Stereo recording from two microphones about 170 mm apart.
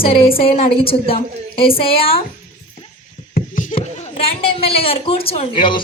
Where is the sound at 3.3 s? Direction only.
50° left (ahead or behind).